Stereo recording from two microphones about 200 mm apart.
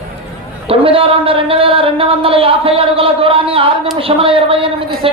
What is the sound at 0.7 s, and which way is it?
A man's voice, 30° right (ahead or behind).